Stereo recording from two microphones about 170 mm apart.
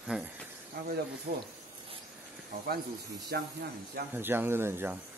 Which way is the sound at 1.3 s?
50° right (ahead or behind).